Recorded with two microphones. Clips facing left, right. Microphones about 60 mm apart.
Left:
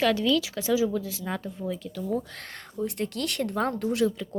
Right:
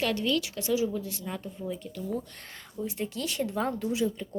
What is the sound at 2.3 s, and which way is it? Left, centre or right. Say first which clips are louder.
Speech: left 4 dB; left.